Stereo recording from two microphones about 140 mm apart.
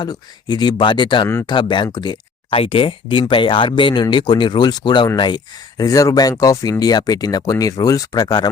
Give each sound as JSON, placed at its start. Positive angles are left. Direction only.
{"t": 0.0, "sound": "speech", "side_deg": 30}